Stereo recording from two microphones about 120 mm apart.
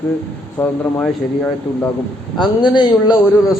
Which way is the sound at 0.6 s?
15° left (ahead or behind).